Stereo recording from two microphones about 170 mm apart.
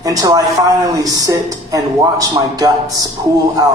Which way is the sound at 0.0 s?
20° right (ahead or behind).